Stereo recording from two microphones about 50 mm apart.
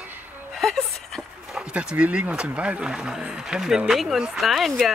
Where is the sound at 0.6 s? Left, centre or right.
Centre.